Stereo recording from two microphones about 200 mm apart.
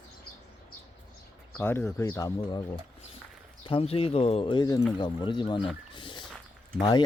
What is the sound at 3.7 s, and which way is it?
Speech, 30° left (ahead or behind).